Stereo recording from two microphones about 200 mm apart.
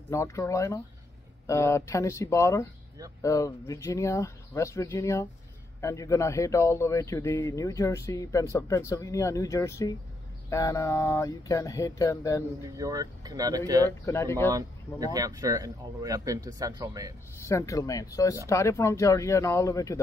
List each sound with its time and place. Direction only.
0.1 s a man's voice: 15° left (ahead or behind)
12.6 s speech: 15° right (ahead or behind)
14.0 s a man's voice: 15° left (ahead or behind)
14.5 s speech: 15° right (ahead or behind)
17.4 s a man's voice: 15° left (ahead or behind)